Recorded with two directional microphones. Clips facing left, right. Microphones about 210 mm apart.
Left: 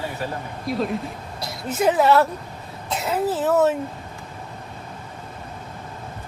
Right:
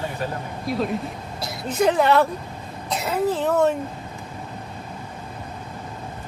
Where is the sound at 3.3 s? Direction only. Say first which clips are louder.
Left 1 dB; 5° left (ahead or behind).